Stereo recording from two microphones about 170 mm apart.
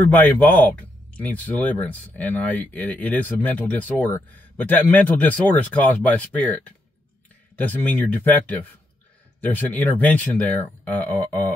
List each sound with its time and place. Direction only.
0.0 s speech: 10° left (ahead or behind)